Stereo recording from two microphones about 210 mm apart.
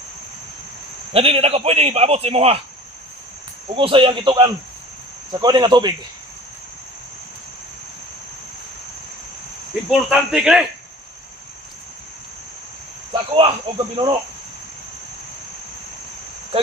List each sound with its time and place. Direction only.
1.1 s a man's voice: 25° right (ahead or behind)
3.8 s a man's voice: 25° right (ahead or behind)
9.9 s speech: 5° right (ahead or behind)
13.3 s a man's voice: 25° right (ahead or behind)